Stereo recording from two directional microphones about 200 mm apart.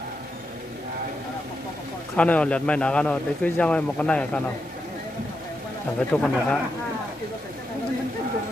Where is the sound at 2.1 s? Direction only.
5° left (ahead or behind).